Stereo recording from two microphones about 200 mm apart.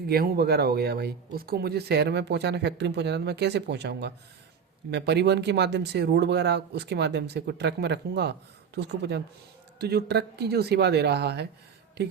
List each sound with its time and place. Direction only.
0.1 s speech: 50° right (ahead or behind)